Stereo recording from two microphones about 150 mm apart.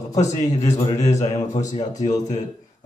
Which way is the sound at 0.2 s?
50° left (ahead or behind).